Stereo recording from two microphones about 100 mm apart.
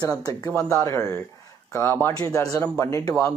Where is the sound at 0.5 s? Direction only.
25° left (ahead or behind).